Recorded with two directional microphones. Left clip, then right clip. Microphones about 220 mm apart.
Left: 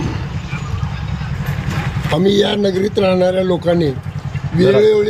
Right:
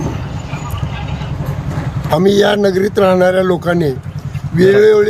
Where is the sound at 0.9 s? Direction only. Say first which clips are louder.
Right 4 dB; 40° right (ahead or behind).